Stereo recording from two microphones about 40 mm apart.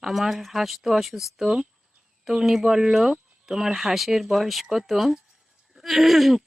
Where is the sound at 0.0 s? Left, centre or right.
Centre.